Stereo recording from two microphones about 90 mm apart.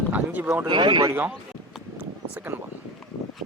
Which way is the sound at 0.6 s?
60° right (ahead or behind).